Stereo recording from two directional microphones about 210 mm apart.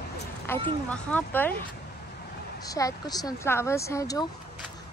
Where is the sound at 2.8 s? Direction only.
15° left (ahead or behind).